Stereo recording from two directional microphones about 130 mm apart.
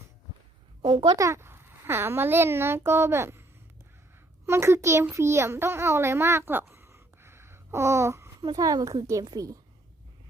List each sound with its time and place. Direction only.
0.9 s a child's voice: 30° right (ahead or behind)
4.4 s a child's voice: 20° right (ahead or behind)